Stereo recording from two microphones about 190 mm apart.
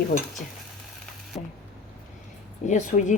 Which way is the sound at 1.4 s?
30° left (ahead or behind).